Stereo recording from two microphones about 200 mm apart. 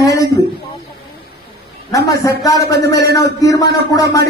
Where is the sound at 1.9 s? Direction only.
15° left (ahead or behind).